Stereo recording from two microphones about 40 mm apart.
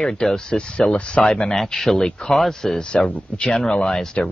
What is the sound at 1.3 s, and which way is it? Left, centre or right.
Speech, centre.